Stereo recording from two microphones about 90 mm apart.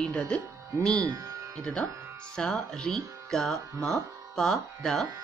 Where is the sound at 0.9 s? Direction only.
40° right (ahead or behind).